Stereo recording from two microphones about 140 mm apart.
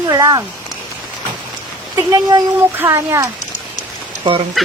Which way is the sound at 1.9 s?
25° right (ahead or behind).